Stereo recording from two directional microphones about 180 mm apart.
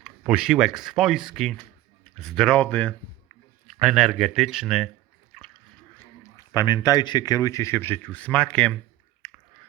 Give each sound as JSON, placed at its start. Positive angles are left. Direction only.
{"t": 0.0, "sound": "speech", "side_deg": -5}
{"t": 5.3, "sound": "splash", "side_deg": 0}
{"t": 6.0, "sound": "speech", "side_deg": 15}
{"t": 9.2, "sound": "a sound", "side_deg": 5}